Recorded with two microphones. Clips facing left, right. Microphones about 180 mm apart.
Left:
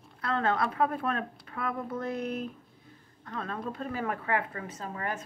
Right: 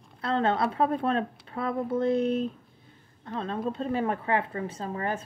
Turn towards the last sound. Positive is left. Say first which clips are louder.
# right 4 dB
turn(degrees=-30)  # may be behind; listen again after turning